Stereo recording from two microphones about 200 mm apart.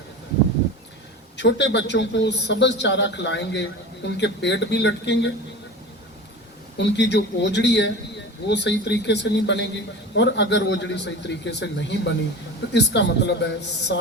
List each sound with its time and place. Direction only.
1.4 s a man's voice: 60° left (ahead or behind)
6.7 s a man's voice: 60° left (ahead or behind)